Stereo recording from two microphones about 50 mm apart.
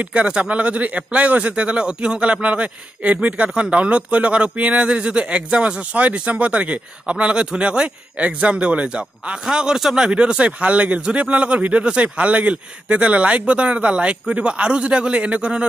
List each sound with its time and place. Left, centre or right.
0.0 s speech: right
10.0 s speech: centre